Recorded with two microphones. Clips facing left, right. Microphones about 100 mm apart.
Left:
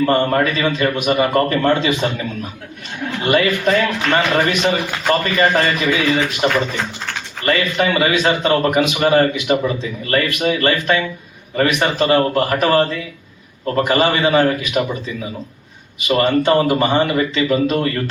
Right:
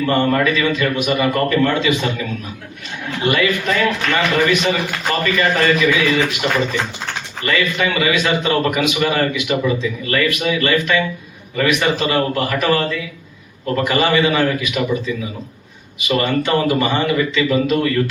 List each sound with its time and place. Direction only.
0.0 s a man's voice: 40° left (ahead or behind)
3.2 s a man's voice: 40° left (ahead or behind)
16.0 s a man's voice: 40° left (ahead or behind)